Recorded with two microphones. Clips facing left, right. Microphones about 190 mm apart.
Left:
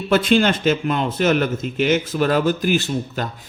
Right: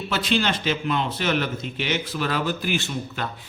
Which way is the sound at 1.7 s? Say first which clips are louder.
Left 8 dB; 45° left (ahead or behind).